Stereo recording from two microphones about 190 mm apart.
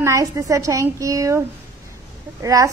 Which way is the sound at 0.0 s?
15° right (ahead or behind).